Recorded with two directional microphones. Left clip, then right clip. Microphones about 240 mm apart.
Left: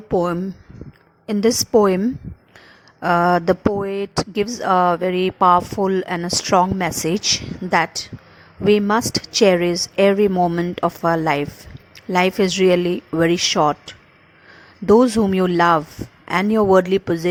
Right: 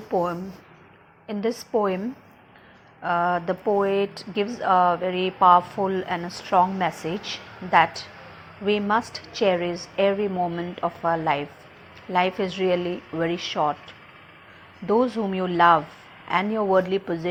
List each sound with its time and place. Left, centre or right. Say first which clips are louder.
0.1 s speech: left 5 dB; left
3.0 s speech: left 7 dB; left